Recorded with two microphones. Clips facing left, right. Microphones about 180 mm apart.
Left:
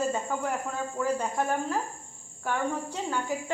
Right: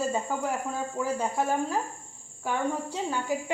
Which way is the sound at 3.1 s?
15° right (ahead or behind).